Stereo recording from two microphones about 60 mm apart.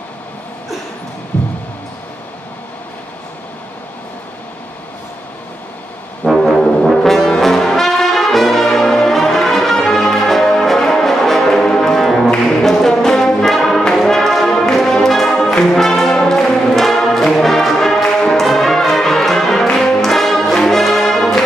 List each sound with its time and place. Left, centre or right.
6.2 s music: centre
6.6 s brass instrument: centre
15.6 s music: centre